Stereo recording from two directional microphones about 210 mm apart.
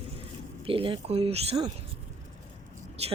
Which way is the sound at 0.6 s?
25° right (ahead or behind).